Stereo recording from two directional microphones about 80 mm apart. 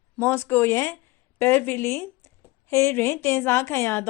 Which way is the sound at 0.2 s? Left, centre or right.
Left.